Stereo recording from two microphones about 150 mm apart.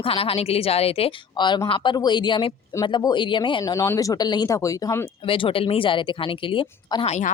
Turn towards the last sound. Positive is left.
turn(degrees=35)  # may be behind; listen again after turning